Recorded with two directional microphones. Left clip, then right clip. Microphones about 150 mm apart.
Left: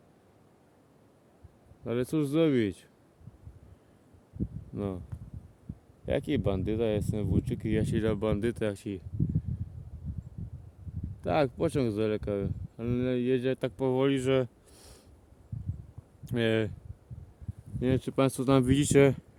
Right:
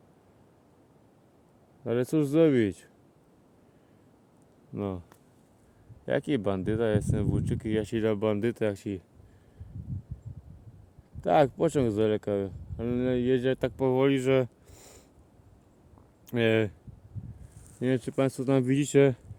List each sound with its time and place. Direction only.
1.8 s speech: centre (ahead or behind)
4.7 s speech: 10° left (ahead or behind)
6.1 s speech: 5° left (ahead or behind)
11.2 s speech: centre (ahead or behind)
16.2 s speech: centre (ahead or behind)
17.7 s speech: 15° left (ahead or behind)